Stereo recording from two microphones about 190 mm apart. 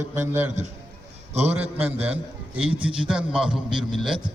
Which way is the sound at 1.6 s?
30° right (ahead or behind).